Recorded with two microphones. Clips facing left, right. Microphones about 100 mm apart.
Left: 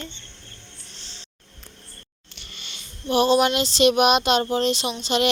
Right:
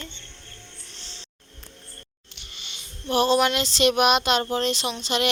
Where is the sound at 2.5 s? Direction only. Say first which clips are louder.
Left 1 dB; 45° left (ahead or behind).